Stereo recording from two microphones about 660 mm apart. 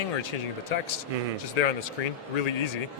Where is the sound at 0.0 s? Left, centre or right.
Left.